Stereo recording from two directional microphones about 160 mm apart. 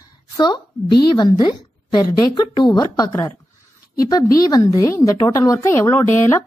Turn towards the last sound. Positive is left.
turn(degrees=15)  # may be behind; listen again after turning